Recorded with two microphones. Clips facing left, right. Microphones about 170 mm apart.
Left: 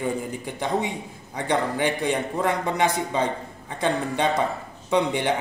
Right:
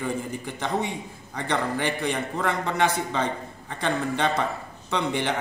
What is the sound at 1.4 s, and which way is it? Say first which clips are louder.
A man's voice: left 3 dB; 15° left (ahead or behind).